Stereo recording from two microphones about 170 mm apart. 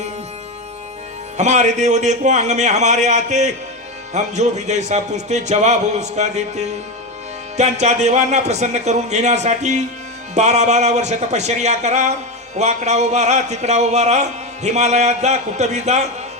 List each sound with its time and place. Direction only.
1.4 s speech: 45° right (ahead or behind)